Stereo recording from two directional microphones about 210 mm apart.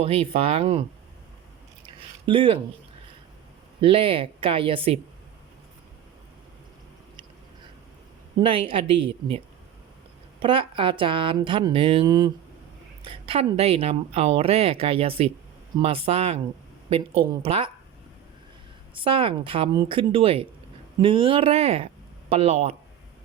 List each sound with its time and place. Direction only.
0.0 s speech: 25° right (ahead or behind)
2.2 s speech: 25° right (ahead or behind)
3.8 s speech: 25° right (ahead or behind)
8.4 s speech: 25° right (ahead or behind)
10.4 s speech: 25° right (ahead or behind)
18.9 s speech: 25° right (ahead or behind)